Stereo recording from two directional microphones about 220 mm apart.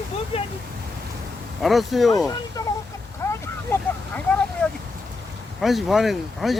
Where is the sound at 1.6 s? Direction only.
Centre (ahead or behind).